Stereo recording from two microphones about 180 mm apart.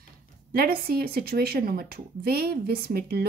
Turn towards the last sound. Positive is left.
turn(degrees=-55)  # may be behind; listen again after turning